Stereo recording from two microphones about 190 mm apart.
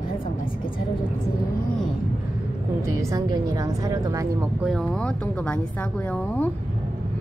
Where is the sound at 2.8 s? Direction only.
15° right (ahead or behind).